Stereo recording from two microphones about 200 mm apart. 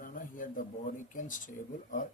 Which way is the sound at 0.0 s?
40° left (ahead or behind).